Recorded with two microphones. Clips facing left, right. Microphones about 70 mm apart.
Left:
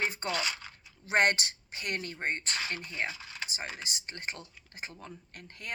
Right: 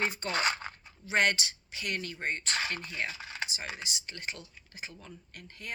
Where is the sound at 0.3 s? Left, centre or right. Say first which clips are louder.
Right 3 dB; right.